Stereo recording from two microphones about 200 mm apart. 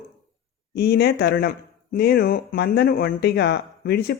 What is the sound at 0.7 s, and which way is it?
Speech, 55° left (ahead or behind).